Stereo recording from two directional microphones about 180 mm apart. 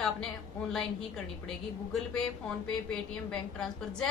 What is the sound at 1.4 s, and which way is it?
Speech, 5° left (ahead or behind).